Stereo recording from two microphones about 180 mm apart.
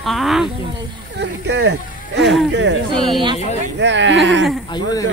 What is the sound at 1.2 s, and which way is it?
Speech, 75° right (ahead or behind).